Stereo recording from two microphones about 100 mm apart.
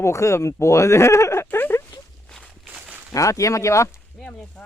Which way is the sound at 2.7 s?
15° right (ahead or behind).